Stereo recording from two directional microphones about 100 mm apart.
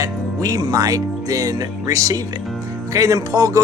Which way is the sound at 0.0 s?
35° right (ahead or behind).